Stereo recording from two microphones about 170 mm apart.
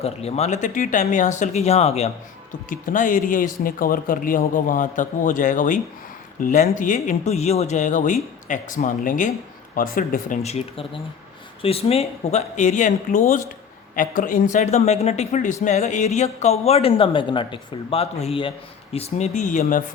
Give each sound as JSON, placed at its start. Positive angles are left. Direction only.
{"t": 0.0, "sound": "speech", "side_deg": 40}
{"t": 2.6, "sound": "speech", "side_deg": 50}